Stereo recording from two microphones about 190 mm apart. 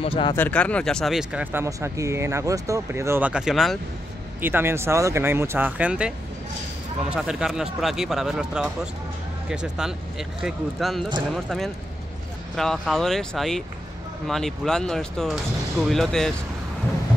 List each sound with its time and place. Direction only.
0.0 s speech: 30° left (ahead or behind)
0.3 s speech: 10° left (ahead or behind)
12.5 s speech: centre (ahead or behind)